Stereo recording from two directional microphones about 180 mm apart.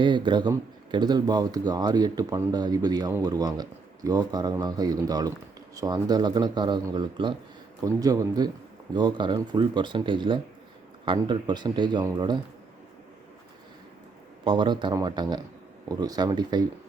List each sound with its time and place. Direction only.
0.0 s speech: 25° right (ahead or behind)
14.4 s speech: 25° right (ahead or behind)